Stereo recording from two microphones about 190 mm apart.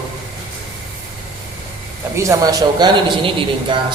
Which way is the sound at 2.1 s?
15° right (ahead or behind).